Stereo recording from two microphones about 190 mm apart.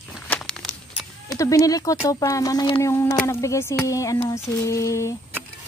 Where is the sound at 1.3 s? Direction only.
15° left (ahead or behind).